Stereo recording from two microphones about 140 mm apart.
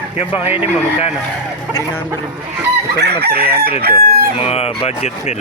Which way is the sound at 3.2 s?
90° right.